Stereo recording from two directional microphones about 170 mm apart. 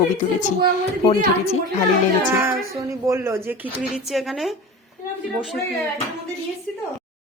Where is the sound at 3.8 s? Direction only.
Centre (ahead or behind).